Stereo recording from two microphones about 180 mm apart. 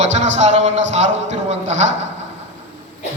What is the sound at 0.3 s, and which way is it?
A man's voice, 40° right (ahead or behind).